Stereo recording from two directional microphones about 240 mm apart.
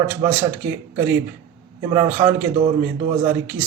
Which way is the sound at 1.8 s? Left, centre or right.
Centre.